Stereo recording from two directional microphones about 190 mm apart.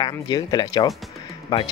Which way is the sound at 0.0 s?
20° left (ahead or behind).